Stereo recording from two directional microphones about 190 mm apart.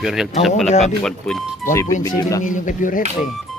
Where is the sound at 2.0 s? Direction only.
15° left (ahead or behind).